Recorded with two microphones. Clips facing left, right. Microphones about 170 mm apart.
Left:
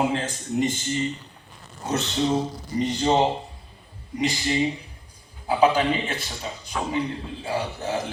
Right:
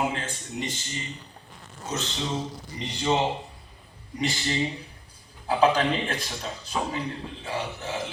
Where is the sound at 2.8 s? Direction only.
35° left (ahead or behind).